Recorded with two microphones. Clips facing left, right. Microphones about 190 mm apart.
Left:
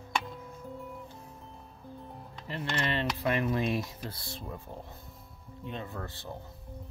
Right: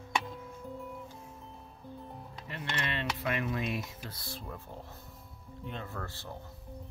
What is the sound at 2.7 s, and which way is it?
Speech, 35° left (ahead or behind).